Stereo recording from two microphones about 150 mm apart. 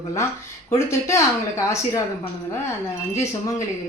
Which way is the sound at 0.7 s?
20° left (ahead or behind).